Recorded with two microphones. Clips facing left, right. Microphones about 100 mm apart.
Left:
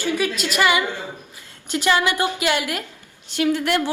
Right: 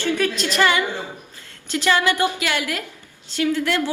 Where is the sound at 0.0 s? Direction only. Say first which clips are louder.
Right 1 dB; 10° left (ahead or behind).